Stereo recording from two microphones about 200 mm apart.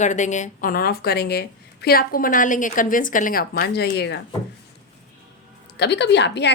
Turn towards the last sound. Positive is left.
turn(degrees=60)  # may be behind; listen again after turning